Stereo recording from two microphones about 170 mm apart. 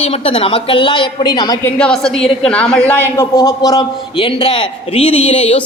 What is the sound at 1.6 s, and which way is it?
A woman's voice, 5° left (ahead or behind).